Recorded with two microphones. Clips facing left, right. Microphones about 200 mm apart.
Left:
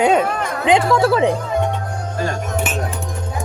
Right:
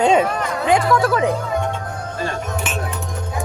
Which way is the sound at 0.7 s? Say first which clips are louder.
Left 2 dB; 25° left (ahead or behind).